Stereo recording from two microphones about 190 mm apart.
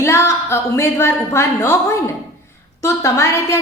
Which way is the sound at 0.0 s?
15° left (ahead or behind).